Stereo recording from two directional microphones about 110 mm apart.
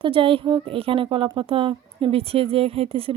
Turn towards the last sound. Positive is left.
turn(degrees=-60)  # may be behind; listen again after turning